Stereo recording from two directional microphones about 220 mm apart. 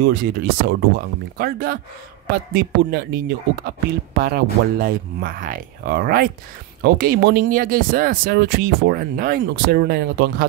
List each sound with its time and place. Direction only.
0.0 s speech: 45° right (ahead or behind)